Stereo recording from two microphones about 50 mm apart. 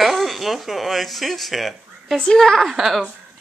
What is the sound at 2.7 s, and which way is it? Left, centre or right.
Speech, centre.